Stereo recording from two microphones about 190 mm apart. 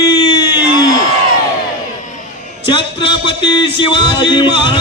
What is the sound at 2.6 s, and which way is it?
A man's voice, 25° left (ahead or behind).